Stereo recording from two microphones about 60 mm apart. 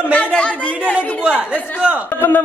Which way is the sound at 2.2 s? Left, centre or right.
Left.